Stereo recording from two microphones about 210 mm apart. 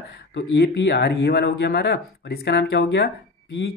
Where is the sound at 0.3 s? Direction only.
60° left (ahead or behind).